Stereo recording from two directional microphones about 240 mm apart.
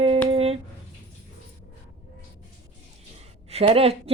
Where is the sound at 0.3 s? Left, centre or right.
Right.